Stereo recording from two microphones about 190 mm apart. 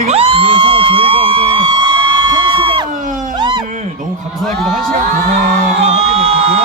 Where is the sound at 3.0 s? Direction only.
45° right (ahead or behind).